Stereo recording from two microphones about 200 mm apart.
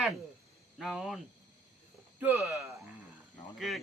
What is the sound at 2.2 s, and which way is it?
Speech, 10° right (ahead or behind).